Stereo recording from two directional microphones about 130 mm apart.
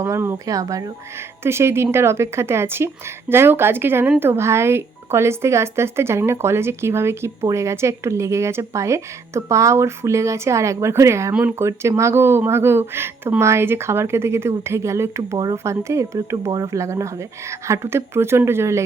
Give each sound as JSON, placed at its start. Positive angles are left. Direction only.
{"t": 0.0, "sound": "speech", "side_deg": -15}